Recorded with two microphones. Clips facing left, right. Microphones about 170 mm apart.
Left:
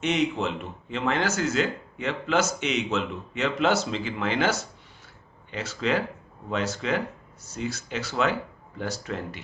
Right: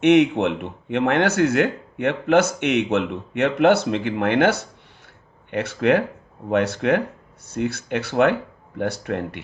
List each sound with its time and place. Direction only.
0.0 s speech: 65° right (ahead or behind)